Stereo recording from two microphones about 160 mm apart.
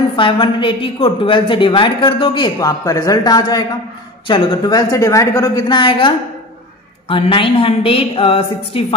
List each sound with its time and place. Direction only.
0.1 s a woman's voice: 30° left (ahead or behind)